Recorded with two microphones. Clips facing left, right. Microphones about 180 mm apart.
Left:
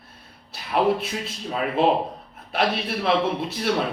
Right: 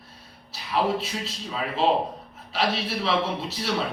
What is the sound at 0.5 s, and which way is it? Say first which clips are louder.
A man's voice: left 4 dB; 55° left (ahead or behind).